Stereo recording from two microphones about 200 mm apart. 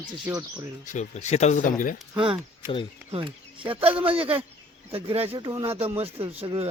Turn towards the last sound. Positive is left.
turn(degrees=-30)  # may be behind; listen again after turning